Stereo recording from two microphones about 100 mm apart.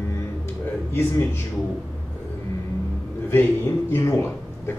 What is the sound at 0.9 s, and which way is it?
Speech, 25° left (ahead or behind).